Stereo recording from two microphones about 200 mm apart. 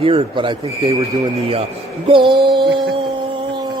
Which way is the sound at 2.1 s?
25° right (ahead or behind).